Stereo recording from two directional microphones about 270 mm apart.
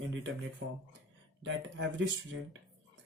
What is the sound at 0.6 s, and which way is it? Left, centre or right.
Speech, right.